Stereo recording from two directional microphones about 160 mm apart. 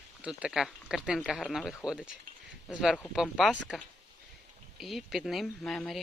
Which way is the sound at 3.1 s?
5° right (ahead or behind).